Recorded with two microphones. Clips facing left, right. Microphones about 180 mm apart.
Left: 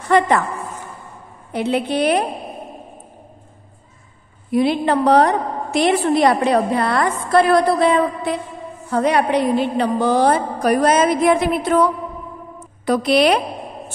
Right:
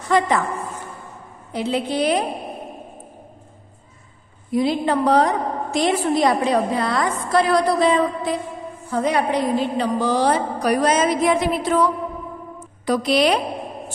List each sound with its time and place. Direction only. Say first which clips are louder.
0.1 s a woman's voice: left 3 dB; 60° left (ahead or behind)
1.5 s a woman's voice: left 3 dB; 60° left (ahead or behind)
4.5 s a woman's voice: left 3 dB; 65° left (ahead or behind)
12.5 s a sound: left 2 dB; 55° left (ahead or behind)